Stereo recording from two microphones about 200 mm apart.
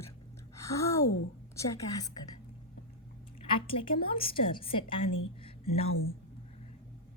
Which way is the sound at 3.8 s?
25° left (ahead or behind).